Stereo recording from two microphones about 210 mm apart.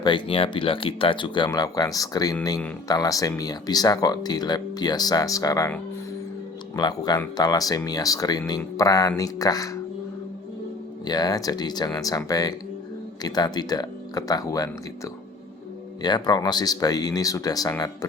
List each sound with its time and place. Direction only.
0.0 s speech: 25° left (ahead or behind)
11.0 s speech: 20° left (ahead or behind)